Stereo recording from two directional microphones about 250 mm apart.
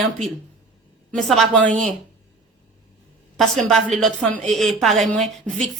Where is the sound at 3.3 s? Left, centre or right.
Centre.